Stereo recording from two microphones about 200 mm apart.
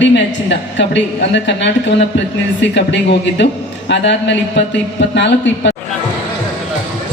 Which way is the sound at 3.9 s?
60° left (ahead or behind).